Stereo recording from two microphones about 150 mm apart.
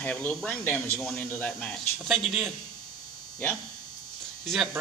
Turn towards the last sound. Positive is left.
turn(degrees=0)  # may be behind; listen again after turning